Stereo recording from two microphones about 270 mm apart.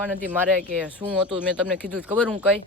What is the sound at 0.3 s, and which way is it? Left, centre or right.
Speech, centre.